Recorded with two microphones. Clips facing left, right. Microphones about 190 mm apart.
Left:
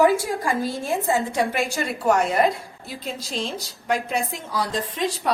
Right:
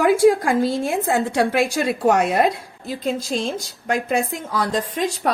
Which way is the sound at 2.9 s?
45° right (ahead or behind).